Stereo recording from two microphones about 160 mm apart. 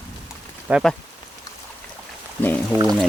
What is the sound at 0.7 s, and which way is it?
Speech, centre (ahead or behind).